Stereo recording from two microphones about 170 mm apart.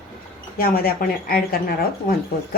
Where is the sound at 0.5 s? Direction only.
60° left (ahead or behind).